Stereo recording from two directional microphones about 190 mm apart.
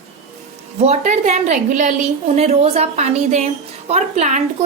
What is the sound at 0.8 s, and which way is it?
A woman's voice, 35° right (ahead or behind).